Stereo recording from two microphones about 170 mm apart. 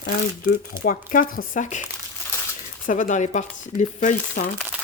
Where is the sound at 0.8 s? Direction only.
55° left (ahead or behind).